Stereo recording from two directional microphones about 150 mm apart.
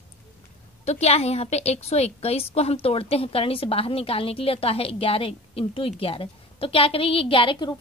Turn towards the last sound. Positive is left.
turn(degrees=35)  # may be behind; listen again after turning